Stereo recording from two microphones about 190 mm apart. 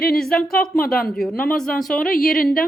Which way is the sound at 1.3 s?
50° left (ahead or behind).